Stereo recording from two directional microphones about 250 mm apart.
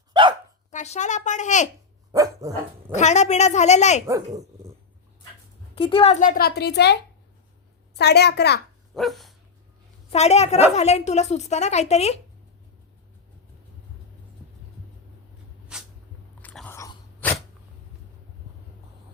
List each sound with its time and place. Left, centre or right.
0.1 s dog: centre
0.7 s a woman's voice: left
2.1 s dog: centre
2.9 s a woman's voice: left
4.0 s speech: centre
5.7 s a woman's voice: left
9.0 s dog: centre
10.1 s a woman's voice: left
15.7 s a sound: centre
16.4 s biting: centre